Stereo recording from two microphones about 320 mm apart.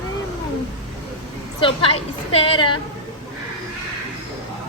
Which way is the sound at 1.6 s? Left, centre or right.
Centre.